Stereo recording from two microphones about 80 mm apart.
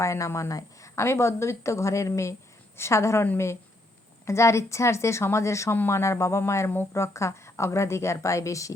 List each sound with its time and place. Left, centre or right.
0.0 s a woman's voice: left